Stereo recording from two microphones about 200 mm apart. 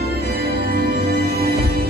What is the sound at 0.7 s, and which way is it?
Music, 50° right (ahead or behind).